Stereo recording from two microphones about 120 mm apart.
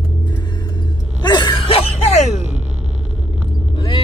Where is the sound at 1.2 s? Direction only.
40° left (ahead or behind); by 2.4 s 70° left (ahead or behind).